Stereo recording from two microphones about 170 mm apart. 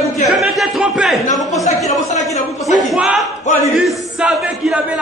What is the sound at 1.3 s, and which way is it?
Speech, 20° left (ahead or behind).